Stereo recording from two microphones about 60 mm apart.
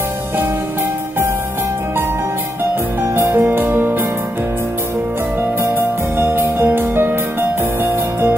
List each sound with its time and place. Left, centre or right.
3.0 s music: right
5.6 s music: right